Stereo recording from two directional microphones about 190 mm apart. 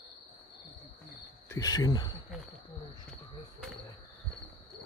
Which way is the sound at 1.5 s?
20° left (ahead or behind).